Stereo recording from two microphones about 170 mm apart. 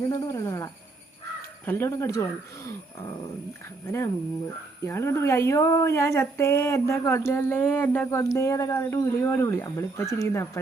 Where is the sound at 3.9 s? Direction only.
15° left (ahead or behind).